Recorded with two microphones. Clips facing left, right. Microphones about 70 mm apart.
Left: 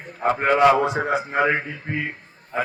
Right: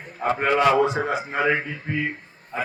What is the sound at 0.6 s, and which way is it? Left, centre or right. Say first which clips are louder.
Speech: left 2 dB; centre.